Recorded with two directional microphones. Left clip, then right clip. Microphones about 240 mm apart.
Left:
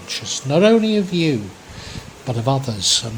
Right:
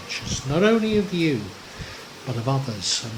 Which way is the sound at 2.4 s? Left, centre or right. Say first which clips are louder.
Left 7 dB; left.